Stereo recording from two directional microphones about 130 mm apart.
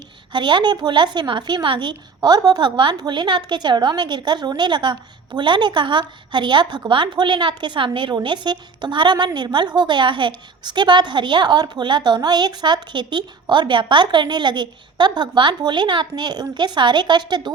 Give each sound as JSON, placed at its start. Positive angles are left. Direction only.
{"t": 0.3, "sound": "a woman's voice", "side_deg": -35}